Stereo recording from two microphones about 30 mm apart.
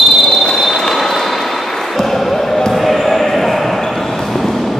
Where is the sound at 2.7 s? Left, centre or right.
Centre.